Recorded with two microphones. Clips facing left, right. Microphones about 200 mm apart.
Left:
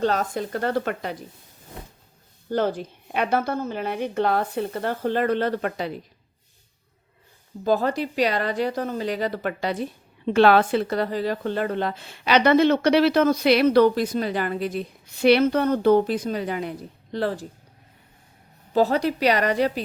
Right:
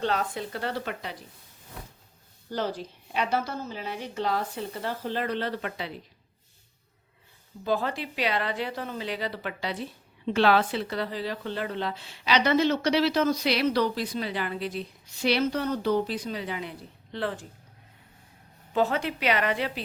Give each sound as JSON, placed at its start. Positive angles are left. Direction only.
{"t": 0.0, "sound": "a woman's voice", "side_deg": 45}
{"t": 2.5, "sound": "a woman's voice", "side_deg": 55}
{"t": 7.6, "sound": "a woman's voice", "side_deg": 45}
{"t": 18.7, "sound": "a woman's voice", "side_deg": 35}